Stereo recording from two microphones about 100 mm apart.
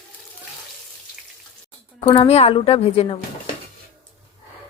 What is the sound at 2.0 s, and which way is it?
A woman's voice, 80° left.